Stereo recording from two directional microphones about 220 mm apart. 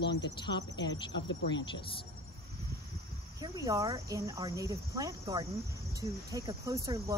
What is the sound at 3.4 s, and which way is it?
Speech, 15° right (ahead or behind).